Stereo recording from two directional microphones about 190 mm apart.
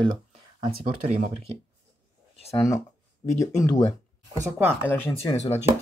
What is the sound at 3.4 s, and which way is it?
Speech, 15° left (ahead or behind).